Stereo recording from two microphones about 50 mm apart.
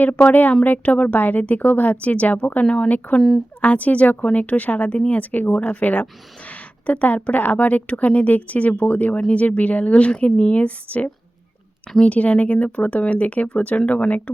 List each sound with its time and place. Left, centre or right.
0.0 s a woman's voice: left
3.2 s speech: centre
3.6 s a woman's voice: left